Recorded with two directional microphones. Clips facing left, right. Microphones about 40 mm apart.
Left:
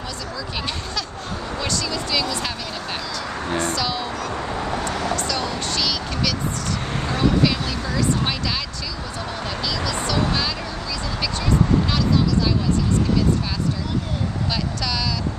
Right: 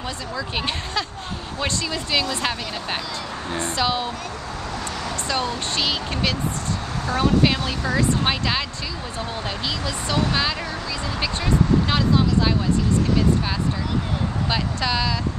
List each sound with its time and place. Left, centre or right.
1.6 s speech: right
3.6 s speech: right
4.6 s vehicle: left
5.3 s speech: right
14.5 s speech: right